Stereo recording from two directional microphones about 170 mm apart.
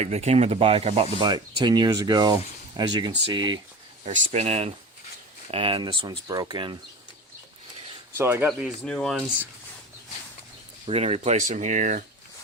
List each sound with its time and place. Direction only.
0.0 s speech: 40° right (ahead or behind)
4.0 s speech: 40° right (ahead or behind); by 6.7 s 25° right (ahead or behind)
8.1 s speech: 15° right (ahead or behind)
8.4 s speech: centre (ahead or behind)
10.8 s speech: 40° right (ahead or behind)